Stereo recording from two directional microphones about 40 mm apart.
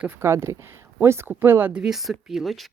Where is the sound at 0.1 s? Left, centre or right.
Right.